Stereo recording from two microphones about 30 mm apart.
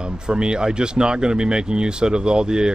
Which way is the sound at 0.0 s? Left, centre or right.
Right.